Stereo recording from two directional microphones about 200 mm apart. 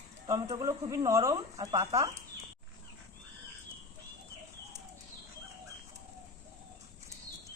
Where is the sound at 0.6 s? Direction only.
15° right (ahead or behind).